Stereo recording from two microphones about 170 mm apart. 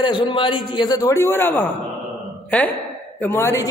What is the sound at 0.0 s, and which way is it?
A man's voice, 30° left (ahead or behind).